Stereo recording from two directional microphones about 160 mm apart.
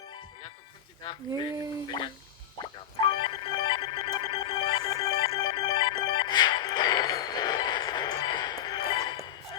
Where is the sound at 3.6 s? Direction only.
30° left (ahead or behind).